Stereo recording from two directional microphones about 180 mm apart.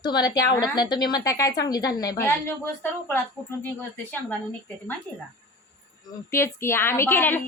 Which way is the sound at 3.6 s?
10° left (ahead or behind).